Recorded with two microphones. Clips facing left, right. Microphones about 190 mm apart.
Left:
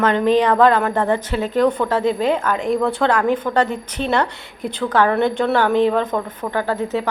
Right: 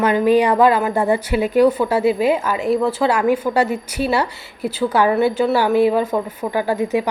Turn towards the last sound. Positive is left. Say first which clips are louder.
# right 2 dB
turn(degrees=-10)  # may be behind; listen again after turning